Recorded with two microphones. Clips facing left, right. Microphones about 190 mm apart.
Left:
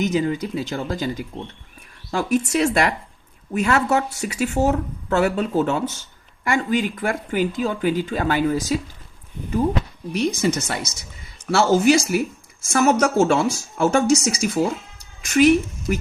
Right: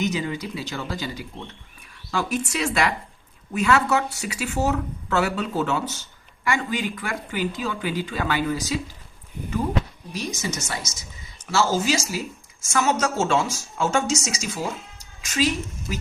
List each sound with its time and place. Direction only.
0.0 s speech: 45° left (ahead or behind)
10.1 s speech: 60° left (ahead or behind)